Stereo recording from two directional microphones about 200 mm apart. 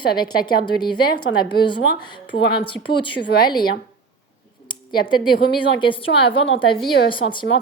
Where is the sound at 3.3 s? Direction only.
50° left (ahead or behind).